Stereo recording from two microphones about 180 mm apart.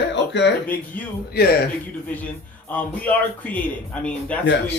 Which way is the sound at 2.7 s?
10° left (ahead or behind).